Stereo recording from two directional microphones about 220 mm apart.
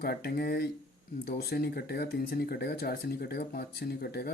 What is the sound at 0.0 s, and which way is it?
Speech, 45° left (ahead or behind).